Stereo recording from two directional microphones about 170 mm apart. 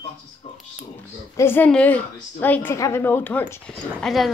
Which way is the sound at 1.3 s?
15° left (ahead or behind).